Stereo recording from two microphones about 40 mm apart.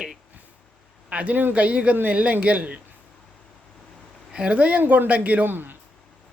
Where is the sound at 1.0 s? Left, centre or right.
Right.